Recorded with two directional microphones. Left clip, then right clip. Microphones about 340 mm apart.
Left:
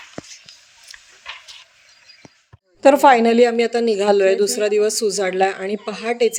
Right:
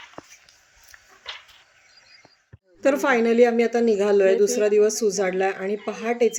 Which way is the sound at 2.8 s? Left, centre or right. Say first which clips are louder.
Left 8 dB; left.